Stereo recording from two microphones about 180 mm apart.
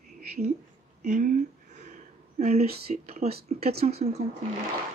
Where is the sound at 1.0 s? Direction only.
45° right (ahead or behind).